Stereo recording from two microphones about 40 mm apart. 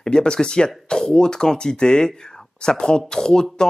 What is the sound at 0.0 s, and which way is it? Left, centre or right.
Speech, centre.